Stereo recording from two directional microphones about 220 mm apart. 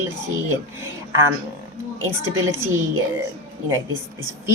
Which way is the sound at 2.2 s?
10° right (ahead or behind).